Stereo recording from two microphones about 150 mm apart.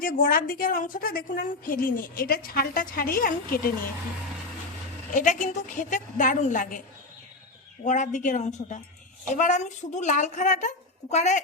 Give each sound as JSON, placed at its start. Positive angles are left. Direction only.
{"t": 0.0, "sound": "a woman's voice", "side_deg": 75}
{"t": 5.1, "sound": "a woman's voice", "side_deg": 55}
{"t": 7.9, "sound": "a woman's voice", "side_deg": 55}